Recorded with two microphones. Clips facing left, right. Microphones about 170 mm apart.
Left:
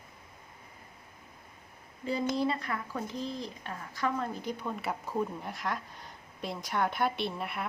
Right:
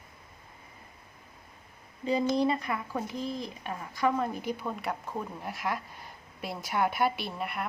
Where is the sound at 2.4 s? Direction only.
15° right (ahead or behind).